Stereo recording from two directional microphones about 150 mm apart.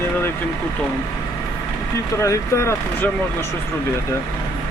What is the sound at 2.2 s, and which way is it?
Speech, 20° left (ahead or behind).